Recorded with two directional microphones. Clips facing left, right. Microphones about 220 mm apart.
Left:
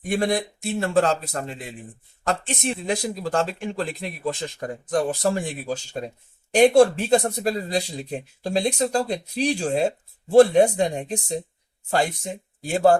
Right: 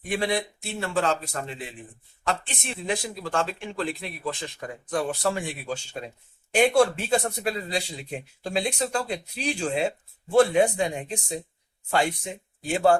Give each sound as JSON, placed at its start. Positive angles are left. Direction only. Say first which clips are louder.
{"t": 0.1, "sound": "speech", "louder": "left 4 dB", "side_deg": 45}